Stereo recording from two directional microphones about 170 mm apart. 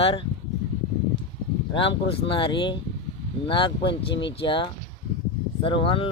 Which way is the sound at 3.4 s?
30° left (ahead or behind).